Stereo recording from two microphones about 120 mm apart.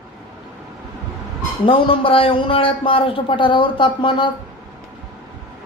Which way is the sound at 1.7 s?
45° left (ahead or behind).